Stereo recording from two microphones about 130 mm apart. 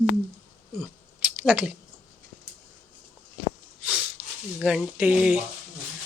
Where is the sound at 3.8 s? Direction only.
10° right (ahead or behind).